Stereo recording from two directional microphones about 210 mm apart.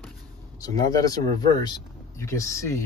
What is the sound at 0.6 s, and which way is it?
Speech, 15° left (ahead or behind).